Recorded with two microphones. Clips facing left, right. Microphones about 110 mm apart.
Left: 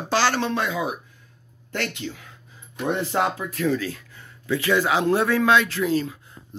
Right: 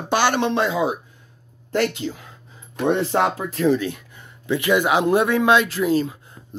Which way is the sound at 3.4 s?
30° right (ahead or behind).